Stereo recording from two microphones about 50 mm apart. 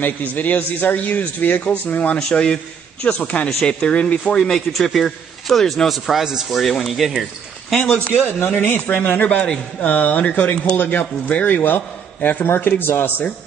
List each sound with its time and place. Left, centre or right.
0.0 s a man's voice: left
1.6 s a man's voice: left
4.4 s a man's voice: centre
7.7 s a man's voice: centre
8.1 s speech: left
8.9 s a man's voice: left